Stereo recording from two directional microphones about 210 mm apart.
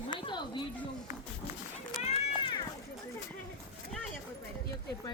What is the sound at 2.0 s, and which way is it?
Run, 25° left (ahead or behind).